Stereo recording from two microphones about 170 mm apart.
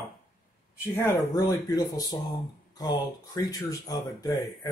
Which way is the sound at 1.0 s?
20° left (ahead or behind).